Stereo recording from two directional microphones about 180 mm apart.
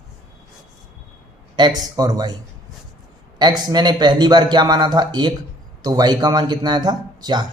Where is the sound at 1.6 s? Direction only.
20° right (ahead or behind).